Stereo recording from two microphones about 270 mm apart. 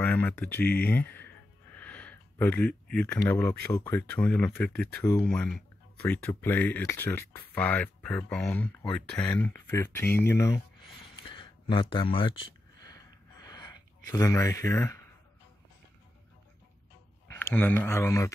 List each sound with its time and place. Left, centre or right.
0.0 s music: centre
3.7 s speech: centre
13.4 s a sound: centre
17.3 s speech: centre